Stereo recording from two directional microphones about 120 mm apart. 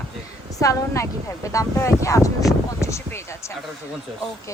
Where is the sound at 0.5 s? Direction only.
25° left (ahead or behind).